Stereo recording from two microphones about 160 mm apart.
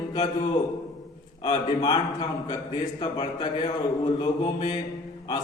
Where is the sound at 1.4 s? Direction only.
25° left (ahead or behind).